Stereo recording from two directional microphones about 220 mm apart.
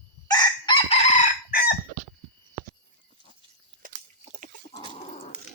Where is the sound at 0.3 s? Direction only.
20° left (ahead or behind).